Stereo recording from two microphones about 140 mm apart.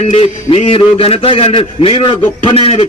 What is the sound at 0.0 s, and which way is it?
A man's voice, 45° left (ahead or behind).